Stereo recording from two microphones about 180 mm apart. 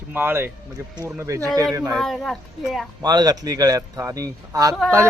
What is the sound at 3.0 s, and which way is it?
Speech, 20° right (ahead or behind).